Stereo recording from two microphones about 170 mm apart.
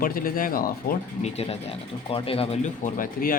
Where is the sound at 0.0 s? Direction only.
55° left (ahead or behind).